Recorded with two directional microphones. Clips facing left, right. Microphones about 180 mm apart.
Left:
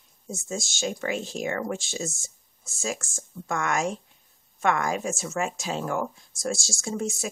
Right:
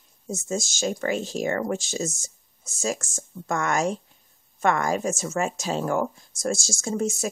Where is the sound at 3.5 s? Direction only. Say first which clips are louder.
Right 3 dB; 35° right (ahead or behind).